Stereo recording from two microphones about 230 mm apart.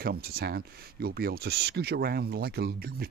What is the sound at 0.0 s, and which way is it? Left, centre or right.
Speech, right.